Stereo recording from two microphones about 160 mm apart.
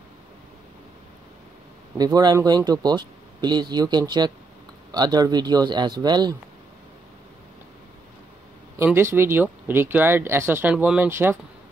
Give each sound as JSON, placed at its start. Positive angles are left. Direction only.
{"t": 2.0, "sound": "speech", "side_deg": -25}
{"t": 8.7, "sound": "speech", "side_deg": -15}